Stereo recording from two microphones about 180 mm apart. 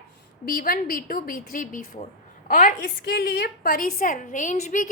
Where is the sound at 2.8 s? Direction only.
70° left (ahead or behind).